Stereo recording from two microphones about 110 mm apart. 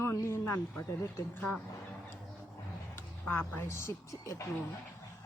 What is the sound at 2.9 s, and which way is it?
Speech, 20° left (ahead or behind).